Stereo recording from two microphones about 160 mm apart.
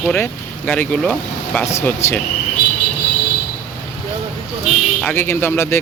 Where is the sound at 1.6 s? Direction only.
15° left (ahead or behind).